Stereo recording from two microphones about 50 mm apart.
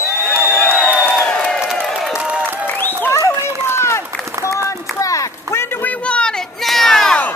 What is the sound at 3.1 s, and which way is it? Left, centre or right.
Run, left.